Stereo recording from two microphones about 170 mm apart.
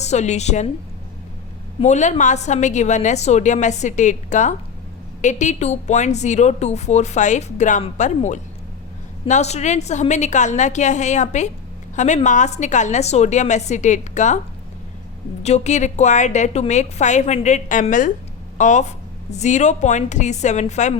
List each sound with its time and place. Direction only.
0.0 s a woman's voice: 40° left (ahead or behind)
1.8 s speech: 45° left (ahead or behind)
15.4 s speech: 40° left (ahead or behind)